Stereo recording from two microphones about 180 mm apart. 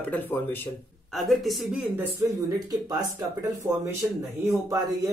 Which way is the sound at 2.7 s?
20° right (ahead or behind).